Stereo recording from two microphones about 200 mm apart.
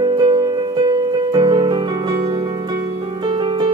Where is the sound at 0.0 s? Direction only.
20° right (ahead or behind).